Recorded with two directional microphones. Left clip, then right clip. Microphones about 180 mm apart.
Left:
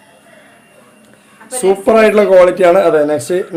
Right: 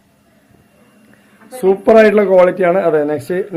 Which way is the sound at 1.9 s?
15° left (ahead or behind).